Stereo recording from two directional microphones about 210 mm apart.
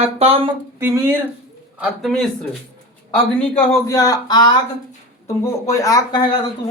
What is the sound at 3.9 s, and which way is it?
Speech, 15° left (ahead or behind).